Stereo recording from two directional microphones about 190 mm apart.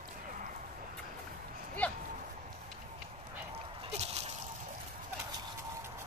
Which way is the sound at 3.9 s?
35° right (ahead or behind).